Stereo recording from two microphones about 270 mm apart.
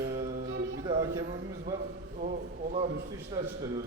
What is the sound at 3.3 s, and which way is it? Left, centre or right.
Speech, centre.